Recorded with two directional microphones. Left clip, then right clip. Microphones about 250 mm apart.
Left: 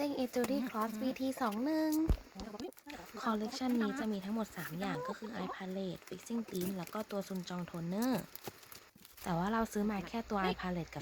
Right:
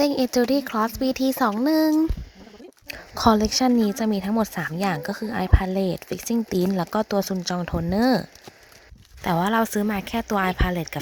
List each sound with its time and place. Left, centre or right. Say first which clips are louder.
0.0 s speech: right 15 dB; right
9.2 s speech: right 14 dB; right